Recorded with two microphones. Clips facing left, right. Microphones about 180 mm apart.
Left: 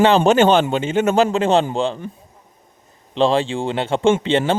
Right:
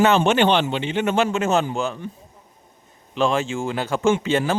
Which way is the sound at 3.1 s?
30° left (ahead or behind).